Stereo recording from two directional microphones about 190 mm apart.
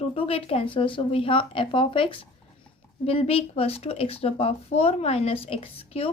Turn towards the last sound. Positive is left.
turn(degrees=30)  # may be behind; listen again after turning